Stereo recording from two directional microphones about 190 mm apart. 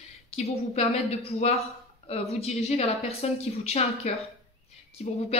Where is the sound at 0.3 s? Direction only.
35° left (ahead or behind).